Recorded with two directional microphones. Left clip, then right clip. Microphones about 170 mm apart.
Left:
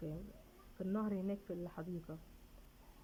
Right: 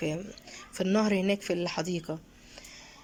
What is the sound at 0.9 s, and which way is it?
A woman's voice, 35° right (ahead or behind).